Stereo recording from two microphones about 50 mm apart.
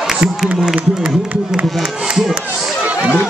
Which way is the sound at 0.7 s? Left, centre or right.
Right.